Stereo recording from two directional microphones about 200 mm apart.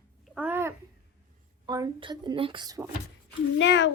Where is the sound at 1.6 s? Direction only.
20° right (ahead or behind).